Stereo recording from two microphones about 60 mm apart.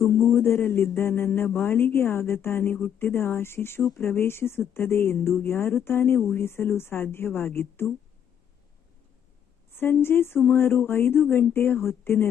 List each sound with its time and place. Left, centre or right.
0.3 s a woman's voice: left
9.7 s a woman's voice: left